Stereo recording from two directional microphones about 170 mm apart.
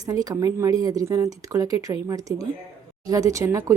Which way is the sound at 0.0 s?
20° right (ahead or behind).